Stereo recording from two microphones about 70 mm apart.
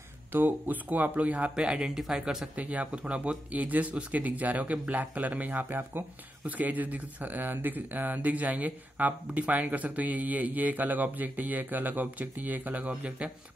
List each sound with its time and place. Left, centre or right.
0.3 s speech: right